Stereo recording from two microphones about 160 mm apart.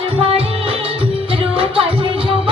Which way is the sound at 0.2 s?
35° right (ahead or behind).